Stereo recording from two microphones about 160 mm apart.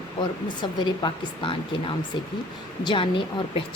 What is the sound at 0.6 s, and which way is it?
A woman's voice, 30° left (ahead or behind).